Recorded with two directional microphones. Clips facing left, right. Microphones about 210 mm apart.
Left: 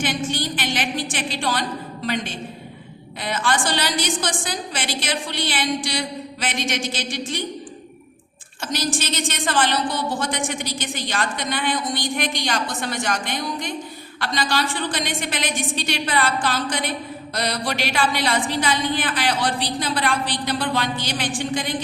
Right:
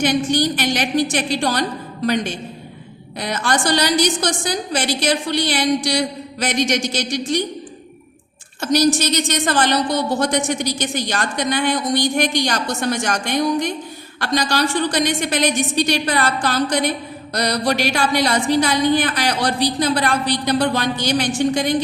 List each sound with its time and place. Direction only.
0.3 s a woman's voice: 40° right (ahead or behind)
3.2 s a woman's voice: 40° right (ahead or behind)
8.6 s a woman's voice: 40° right (ahead or behind)